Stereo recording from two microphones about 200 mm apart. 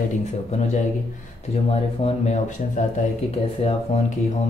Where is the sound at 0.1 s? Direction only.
35° left (ahead or behind).